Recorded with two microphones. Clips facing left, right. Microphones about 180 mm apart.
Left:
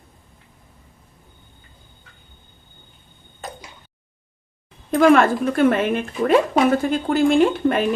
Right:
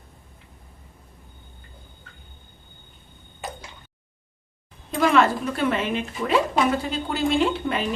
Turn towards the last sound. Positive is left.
turn(degrees=50)  # may be behind; listen again after turning